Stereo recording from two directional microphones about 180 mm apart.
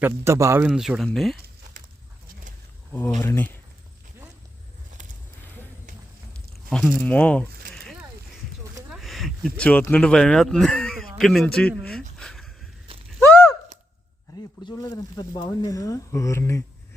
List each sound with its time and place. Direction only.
0.0 s a man's voice: 15° right (ahead or behind)
0.7 s speech: centre (ahead or behind)
2.9 s speech: 10° left (ahead or behind)
6.3 s biting: 5° left (ahead or behind)
7.0 s a sound: 5° left (ahead or behind)
11.2 s speech: centre (ahead or behind)
12.2 s a sound: centre (ahead or behind)
14.6 s speech: 20° left (ahead or behind)